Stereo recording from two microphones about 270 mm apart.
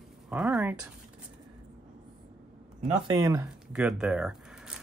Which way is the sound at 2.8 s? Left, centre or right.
Right.